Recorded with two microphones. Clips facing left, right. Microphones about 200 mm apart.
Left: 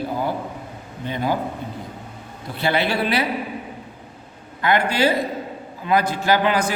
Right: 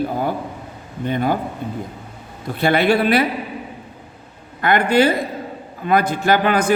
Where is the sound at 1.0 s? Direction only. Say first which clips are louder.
Right 4 dB; 55° right (ahead or behind).